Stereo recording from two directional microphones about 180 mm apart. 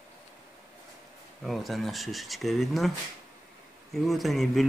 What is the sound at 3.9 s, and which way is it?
Speech, centre (ahead or behind).